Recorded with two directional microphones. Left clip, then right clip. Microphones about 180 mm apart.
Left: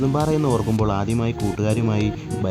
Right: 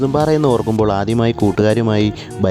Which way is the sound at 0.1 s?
50° right (ahead or behind).